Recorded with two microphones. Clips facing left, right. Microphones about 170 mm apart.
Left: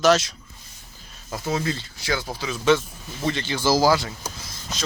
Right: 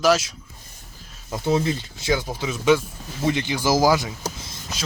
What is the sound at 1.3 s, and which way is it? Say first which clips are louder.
Speech: right 4 dB; 25° right (ahead or behind).